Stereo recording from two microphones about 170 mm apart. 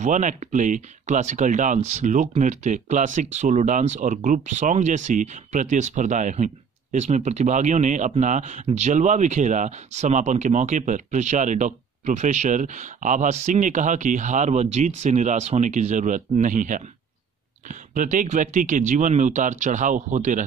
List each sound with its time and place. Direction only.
0.0 s speech: 45° right (ahead or behind)